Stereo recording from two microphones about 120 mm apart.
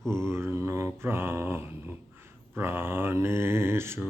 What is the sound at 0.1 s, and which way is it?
Mantra, 20° right (ahead or behind).